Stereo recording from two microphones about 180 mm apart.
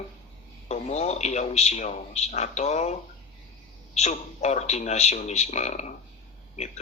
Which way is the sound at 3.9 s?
40° left (ahead or behind).